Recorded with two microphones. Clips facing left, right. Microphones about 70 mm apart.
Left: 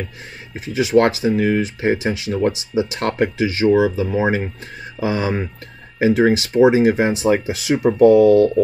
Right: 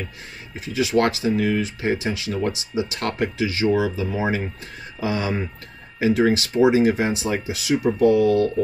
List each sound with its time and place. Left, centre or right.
0.7 s speech: left